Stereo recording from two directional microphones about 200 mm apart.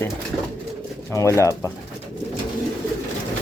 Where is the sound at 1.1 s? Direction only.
15° left (ahead or behind).